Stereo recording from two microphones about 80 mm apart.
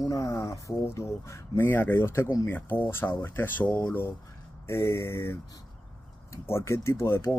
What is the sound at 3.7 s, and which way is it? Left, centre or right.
Speech, left.